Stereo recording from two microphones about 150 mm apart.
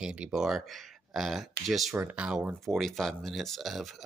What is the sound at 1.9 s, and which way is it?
Speech, 10° right (ahead or behind).